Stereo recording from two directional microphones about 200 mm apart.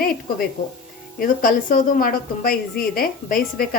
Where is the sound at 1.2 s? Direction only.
45° left (ahead or behind).